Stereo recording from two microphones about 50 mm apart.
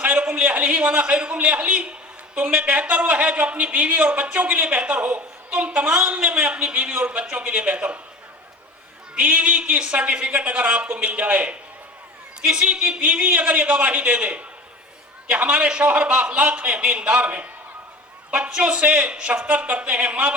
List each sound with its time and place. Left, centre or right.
0.0 s a man's voice: right
9.1 s a man's voice: right